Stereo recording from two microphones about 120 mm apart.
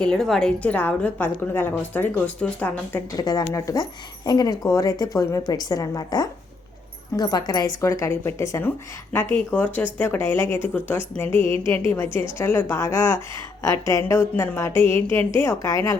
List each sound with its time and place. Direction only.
0.0 s a woman's voice: 5° left (ahead or behind)
3.1 s a woman's voice: 35° left (ahead or behind)